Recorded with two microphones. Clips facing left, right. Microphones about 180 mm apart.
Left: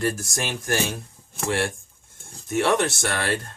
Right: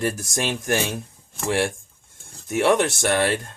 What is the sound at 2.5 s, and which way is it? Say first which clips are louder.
Speech: right 2 dB; 15° right (ahead or behind).